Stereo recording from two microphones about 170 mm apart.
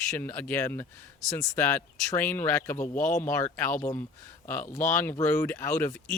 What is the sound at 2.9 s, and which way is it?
Speech, 45° left (ahead or behind).